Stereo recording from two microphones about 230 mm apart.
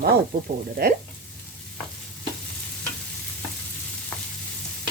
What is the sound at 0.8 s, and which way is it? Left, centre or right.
Speech, right.